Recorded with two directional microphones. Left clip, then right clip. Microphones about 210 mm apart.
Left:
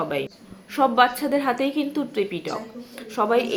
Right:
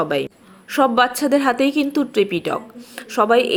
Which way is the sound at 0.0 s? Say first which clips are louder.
Right 6 dB; 40° right (ahead or behind).